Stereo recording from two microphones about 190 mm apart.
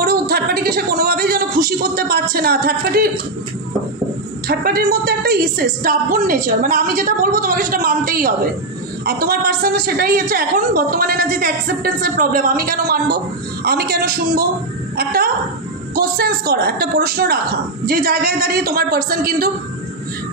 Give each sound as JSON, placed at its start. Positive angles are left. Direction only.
{"t": 0.0, "sound": "a sound", "side_deg": -55}
{"t": 2.3, "sound": "a woman's voice", "side_deg": -55}
{"t": 4.5, "sound": "a woman's voice", "side_deg": -55}